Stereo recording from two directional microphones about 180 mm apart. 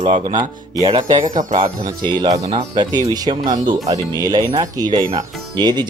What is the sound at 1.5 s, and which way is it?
Speech, 25° right (ahead or behind).